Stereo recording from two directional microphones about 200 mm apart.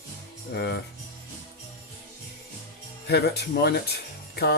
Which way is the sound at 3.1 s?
55° left (ahead or behind).